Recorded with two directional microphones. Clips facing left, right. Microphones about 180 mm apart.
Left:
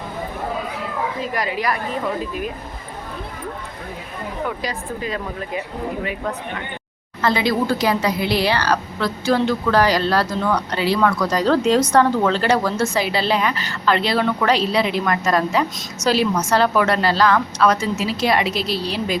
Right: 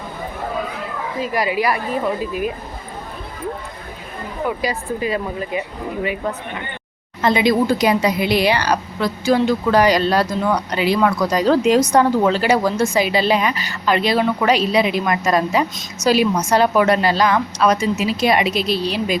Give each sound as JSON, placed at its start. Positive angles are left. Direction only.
{"t": 1.2, "sound": "speech", "side_deg": -10}
{"t": 4.4, "sound": "speech", "side_deg": -10}
{"t": 7.2, "sound": "speech", "side_deg": -20}